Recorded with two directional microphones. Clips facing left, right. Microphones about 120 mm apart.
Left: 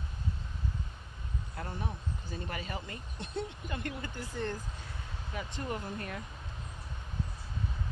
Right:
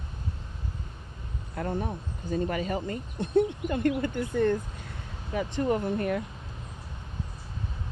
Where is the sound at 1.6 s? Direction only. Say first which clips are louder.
Right 10 dB; 50° right (ahead or behind).